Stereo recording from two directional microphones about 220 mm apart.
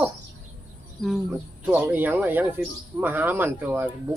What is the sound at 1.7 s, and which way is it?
Speech, 10° right (ahead or behind).